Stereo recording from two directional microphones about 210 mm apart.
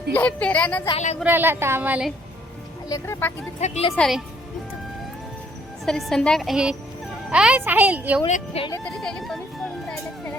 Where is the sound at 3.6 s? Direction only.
30° left (ahead or behind).